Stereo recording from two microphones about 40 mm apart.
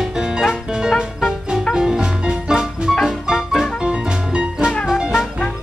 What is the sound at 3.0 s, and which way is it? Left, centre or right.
Music, centre.